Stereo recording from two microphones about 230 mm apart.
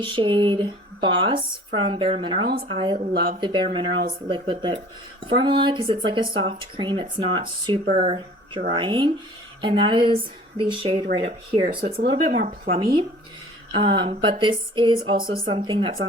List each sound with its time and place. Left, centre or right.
0.0 s speech: right